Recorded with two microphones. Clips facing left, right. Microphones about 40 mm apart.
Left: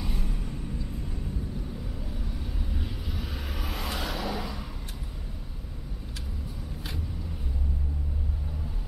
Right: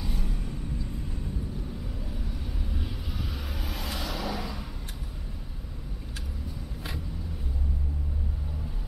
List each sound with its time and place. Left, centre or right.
0.0 s vehicle: centre
2.0 s vehicle: centre
3.5 s vehicle: centre